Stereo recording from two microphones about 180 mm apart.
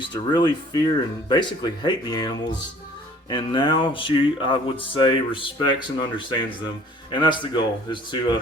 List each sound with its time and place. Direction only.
0.1 s music: 25° left (ahead or behind)